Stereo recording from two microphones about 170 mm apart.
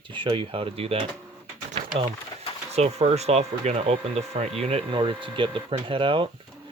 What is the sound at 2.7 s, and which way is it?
Speech, 40° right (ahead or behind).